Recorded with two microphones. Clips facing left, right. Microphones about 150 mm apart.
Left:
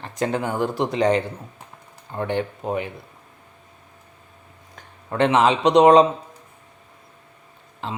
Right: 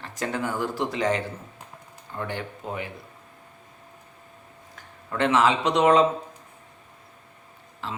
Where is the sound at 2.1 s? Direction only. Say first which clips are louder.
Left 6 dB; 50° left (ahead or behind).